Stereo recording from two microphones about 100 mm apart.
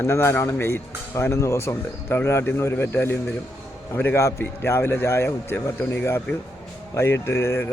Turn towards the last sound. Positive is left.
turn(degrees=25)  # may be behind; listen again after turning